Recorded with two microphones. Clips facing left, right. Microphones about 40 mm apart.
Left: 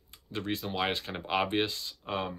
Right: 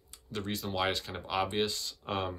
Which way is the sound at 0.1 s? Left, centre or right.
Left.